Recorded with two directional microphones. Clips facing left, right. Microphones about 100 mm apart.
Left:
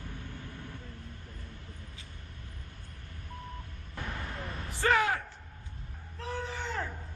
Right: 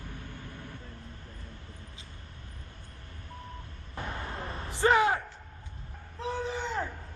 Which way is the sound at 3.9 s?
25° right (ahead or behind).